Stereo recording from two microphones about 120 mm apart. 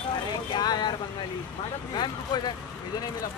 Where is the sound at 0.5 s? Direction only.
35° left (ahead or behind).